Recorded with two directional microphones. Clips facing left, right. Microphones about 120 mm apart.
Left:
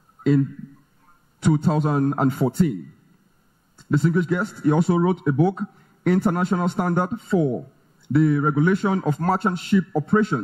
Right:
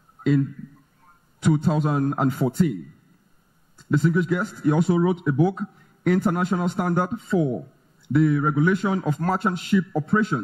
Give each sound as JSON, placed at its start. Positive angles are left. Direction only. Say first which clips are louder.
{"t": 1.6, "sound": "a man's voice", "louder": "left 2 dB", "side_deg": 0}
{"t": 8.2, "sound": "a man's voice", "louder": "left 1 dB", "side_deg": 45}
{"t": 8.6, "sound": "a man's voice", "louder": "left 2 dB", "side_deg": 0}